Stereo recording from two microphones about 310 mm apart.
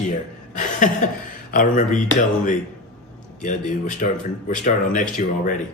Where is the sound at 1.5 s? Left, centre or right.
Left.